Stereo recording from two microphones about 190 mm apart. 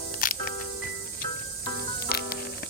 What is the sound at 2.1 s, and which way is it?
Music, 55° left (ahead or behind).